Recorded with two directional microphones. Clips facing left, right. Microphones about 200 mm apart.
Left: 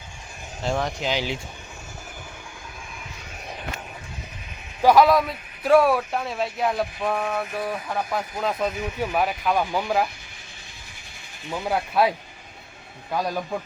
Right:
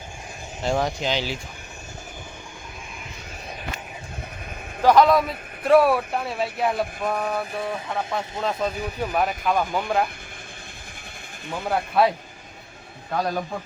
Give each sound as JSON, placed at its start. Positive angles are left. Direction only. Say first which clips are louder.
{"t": 0.6, "sound": "a man's voice", "louder": "right 2 dB", "side_deg": 0}
{"t": 1.1, "sound": "speech", "louder": "even", "side_deg": 15}
{"t": 4.8, "sound": "a man's voice", "louder": "even", "side_deg": 5}
{"t": 11.5, "sound": "a man's voice", "louder": "right 1 dB", "side_deg": 0}